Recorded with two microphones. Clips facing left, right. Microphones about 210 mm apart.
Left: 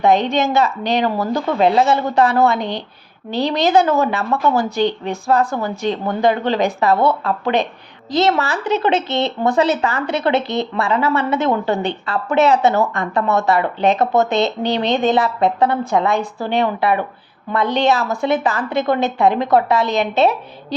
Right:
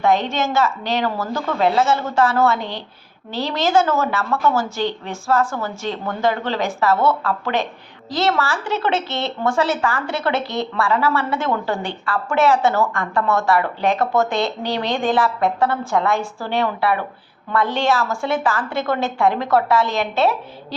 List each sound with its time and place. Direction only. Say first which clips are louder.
0.0 s a woman's voice: left 3 dB; 20° left (ahead or behind)